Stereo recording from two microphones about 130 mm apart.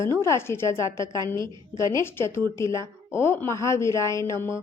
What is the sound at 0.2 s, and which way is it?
Speech, 20° left (ahead or behind).